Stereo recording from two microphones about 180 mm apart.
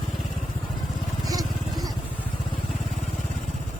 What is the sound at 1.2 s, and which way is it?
Vehicle, 20° right (ahead or behind).